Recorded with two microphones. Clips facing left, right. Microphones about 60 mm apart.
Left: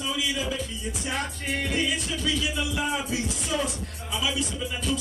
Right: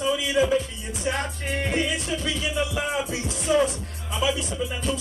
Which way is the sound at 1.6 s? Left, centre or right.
Right.